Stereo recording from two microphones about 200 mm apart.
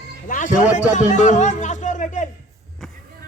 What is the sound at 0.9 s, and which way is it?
Speech, 35° left (ahead or behind).